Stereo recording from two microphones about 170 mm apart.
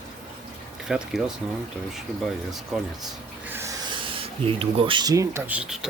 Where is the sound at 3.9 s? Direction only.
30° right (ahead or behind); by 5.9 s 5° right (ahead or behind).